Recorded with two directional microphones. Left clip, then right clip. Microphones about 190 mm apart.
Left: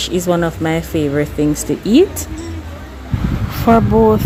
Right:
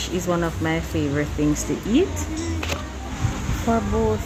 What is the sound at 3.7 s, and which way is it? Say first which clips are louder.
Speech: left 11 dB; 45° left (ahead or behind).